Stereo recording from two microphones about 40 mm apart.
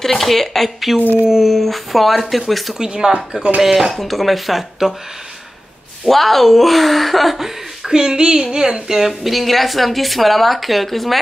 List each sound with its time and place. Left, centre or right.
0.0 s a woman's voice: centre
2.8 s a woman's voice: centre
6.0 s a woman's voice: centre
7.9 s a woman's voice: centre